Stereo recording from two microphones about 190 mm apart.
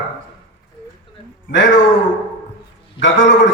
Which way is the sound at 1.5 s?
70° left (ahead or behind).